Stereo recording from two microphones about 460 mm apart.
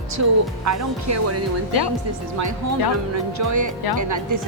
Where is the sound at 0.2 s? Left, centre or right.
Right.